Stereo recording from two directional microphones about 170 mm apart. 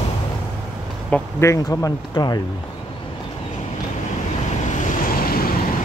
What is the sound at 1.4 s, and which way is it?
Speech, 20° left (ahead or behind).